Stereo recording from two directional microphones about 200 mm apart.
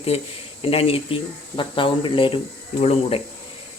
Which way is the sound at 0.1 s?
30° left (ahead or behind).